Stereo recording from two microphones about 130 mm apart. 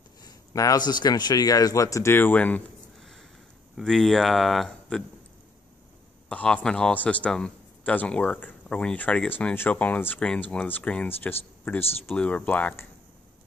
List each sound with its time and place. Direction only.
0.2 s speech: 30° left (ahead or behind); by 2.6 s 10° left (ahead or behind)
3.0 s sniff: centre (ahead or behind)
3.7 s speech: 5° left (ahead or behind)
6.2 s a man's voice: 10° left (ahead or behind)